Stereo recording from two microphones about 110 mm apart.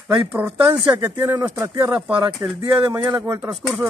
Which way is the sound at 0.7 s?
30° right (ahead or behind).